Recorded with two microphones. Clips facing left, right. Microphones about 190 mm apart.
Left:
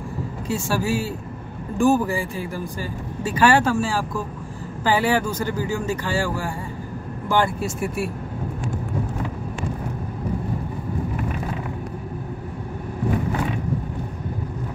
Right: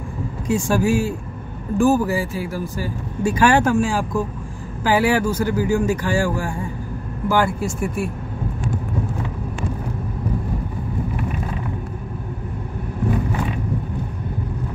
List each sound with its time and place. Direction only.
0.5 s speech: 15° right (ahead or behind)
1.8 s speech: 5° right (ahead or behind)
7.2 s speech: 5° right (ahead or behind)